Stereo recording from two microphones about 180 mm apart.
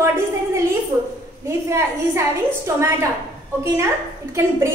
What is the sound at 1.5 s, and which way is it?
Speech, 15° right (ahead or behind).